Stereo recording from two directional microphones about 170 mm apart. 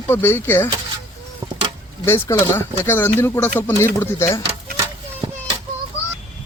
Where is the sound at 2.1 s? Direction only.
15° left (ahead or behind).